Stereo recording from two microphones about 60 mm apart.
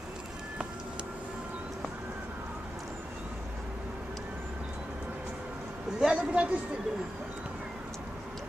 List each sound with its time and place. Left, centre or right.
5.9 s speech: centre